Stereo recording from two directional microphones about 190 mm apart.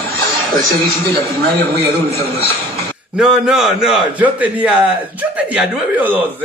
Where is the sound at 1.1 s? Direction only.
55° right (ahead or behind).